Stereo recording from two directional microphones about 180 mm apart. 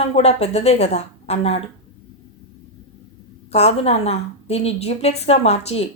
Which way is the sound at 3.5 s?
35° left (ahead or behind).